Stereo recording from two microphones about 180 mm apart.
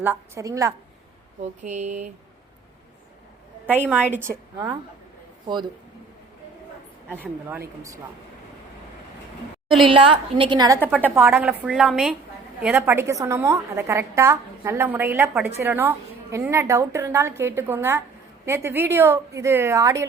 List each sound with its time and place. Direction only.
0.0 s a woman's voice: 15° right (ahead or behind)
1.6 s speech: 40° right (ahead or behind)
3.7 s a woman's voice: 10° right (ahead or behind)
7.1 s a woman's voice: 10° right (ahead or behind)
9.8 s a woman's voice: 30° right (ahead or behind)
10.8 s a woman's voice: 10° right (ahead or behind)